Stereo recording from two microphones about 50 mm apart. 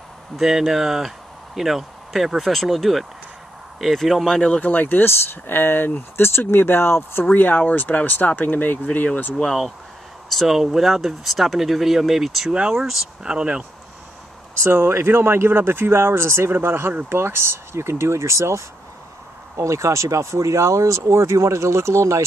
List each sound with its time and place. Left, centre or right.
0.4 s speech: centre
4.6 s speech: left
7.3 s speech: left
9.3 s speech: centre
10.3 s speech: centre
12.4 s speech: right
14.6 s speech: right